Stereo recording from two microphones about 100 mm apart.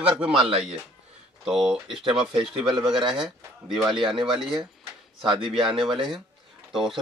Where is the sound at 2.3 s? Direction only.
5° right (ahead or behind).